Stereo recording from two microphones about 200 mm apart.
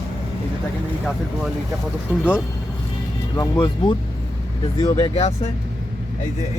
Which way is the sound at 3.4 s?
20° left (ahead or behind).